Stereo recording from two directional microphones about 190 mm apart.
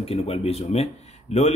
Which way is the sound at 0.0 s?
30° left (ahead or behind).